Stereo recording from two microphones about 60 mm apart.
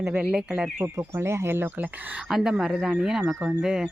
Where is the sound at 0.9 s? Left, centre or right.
Right.